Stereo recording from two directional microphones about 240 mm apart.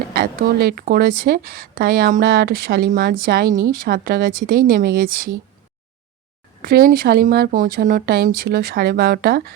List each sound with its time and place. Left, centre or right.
0.1 s speech: right
6.6 s speech: right